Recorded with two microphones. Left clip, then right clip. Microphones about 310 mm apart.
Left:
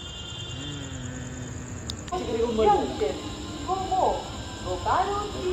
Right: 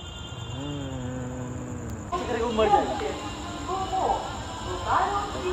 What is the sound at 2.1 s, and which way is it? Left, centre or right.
Snake, centre.